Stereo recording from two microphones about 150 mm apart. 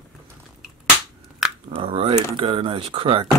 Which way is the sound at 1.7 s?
35° right (ahead or behind).